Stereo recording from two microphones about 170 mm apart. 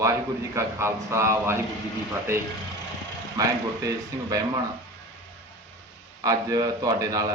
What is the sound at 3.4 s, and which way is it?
Speech, 20° right (ahead or behind).